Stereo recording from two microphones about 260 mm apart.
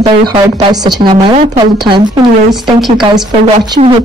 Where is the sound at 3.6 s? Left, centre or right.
Centre.